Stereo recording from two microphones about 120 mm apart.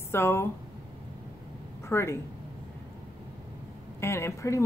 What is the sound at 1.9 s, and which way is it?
Speech, 25° left (ahead or behind).